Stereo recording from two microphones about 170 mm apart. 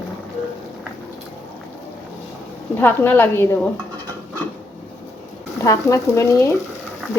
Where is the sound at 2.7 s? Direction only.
10° left (ahead or behind).